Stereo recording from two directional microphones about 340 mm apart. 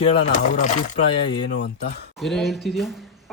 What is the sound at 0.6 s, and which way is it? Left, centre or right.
Speech, left.